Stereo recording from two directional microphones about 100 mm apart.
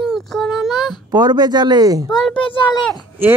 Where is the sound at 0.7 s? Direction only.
45° left (ahead or behind).